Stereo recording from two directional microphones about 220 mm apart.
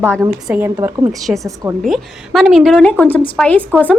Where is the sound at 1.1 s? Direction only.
Centre (ahead or behind).